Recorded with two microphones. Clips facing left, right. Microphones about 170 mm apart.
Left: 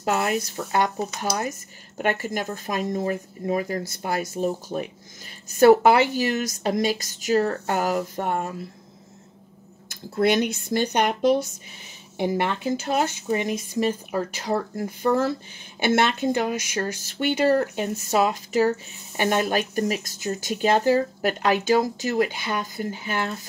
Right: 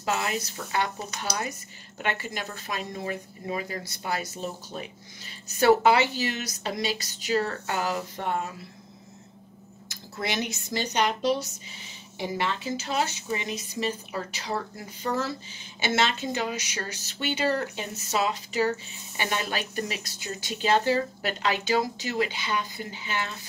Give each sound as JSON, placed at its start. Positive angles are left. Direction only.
{"t": 0.0, "sound": "speech", "side_deg": 55}
{"t": 9.8, "sound": "speech", "side_deg": 55}